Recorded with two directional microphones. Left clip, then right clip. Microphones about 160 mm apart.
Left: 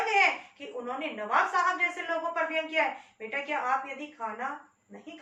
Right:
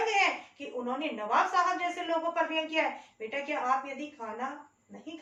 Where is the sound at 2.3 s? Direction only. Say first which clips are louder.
Even; 20° right (ahead or behind).